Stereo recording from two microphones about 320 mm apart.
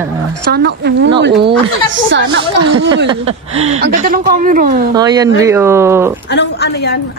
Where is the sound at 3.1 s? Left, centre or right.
Centre.